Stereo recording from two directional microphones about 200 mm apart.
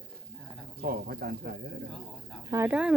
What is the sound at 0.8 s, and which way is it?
Speech, 50° right (ahead or behind).